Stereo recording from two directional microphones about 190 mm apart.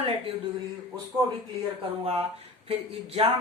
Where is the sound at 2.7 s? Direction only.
30° right (ahead or behind).